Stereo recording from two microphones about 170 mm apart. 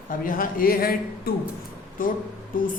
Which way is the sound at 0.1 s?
55° left (ahead or behind).